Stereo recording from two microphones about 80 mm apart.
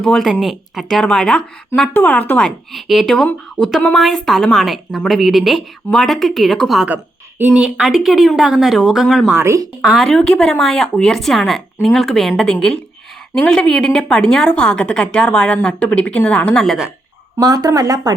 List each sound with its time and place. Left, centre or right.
0.0 s a woman's voice: centre
1.9 s speech: left
2.4 s a woman's voice: centre
6.8 s a woman's voice: right
7.6 s a woman's voice: centre
9.3 s speech: right
9.8 s a woman's voice: centre
16.6 s a woman's voice: centre
17.4 s speech: right